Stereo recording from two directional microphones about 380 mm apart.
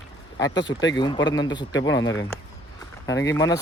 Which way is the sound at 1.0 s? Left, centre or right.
Centre.